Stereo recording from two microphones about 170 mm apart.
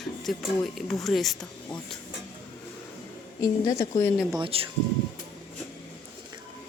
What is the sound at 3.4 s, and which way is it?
Speech, 20° left (ahead or behind).